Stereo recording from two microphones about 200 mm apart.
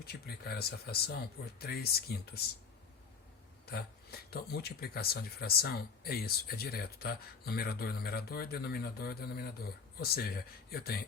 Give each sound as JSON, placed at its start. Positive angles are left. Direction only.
{"t": 0.0, "sound": "speech", "side_deg": 50}
{"t": 3.7, "sound": "speech", "side_deg": 50}